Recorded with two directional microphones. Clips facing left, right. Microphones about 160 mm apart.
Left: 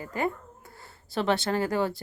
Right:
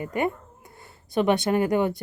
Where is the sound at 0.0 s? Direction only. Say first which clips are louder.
Right 4 dB; 20° right (ahead or behind).